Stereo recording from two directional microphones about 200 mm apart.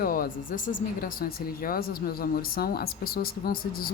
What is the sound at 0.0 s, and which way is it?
Speech, 45° left (ahead or behind).